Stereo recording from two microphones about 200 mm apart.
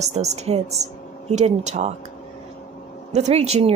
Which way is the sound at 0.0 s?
35° right (ahead or behind).